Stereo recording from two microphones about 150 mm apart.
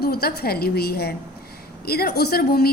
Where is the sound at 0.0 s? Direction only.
90° left.